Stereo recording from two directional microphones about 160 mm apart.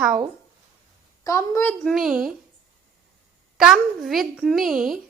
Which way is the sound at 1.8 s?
Centre (ahead or behind).